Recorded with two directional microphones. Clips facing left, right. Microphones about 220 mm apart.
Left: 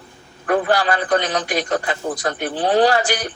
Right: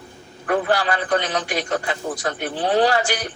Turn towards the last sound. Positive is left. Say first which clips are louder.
# left 2 dB
turn(degrees=40)  # may be behind; listen again after turning